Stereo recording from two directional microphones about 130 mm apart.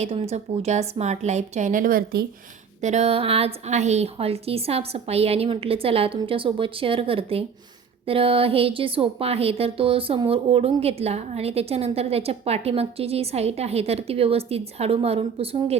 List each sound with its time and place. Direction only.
0.0 s a woman's voice: 50° right (ahead or behind); by 2.0 s 90° right
2.8 s a woman's voice: 60° right (ahead or behind)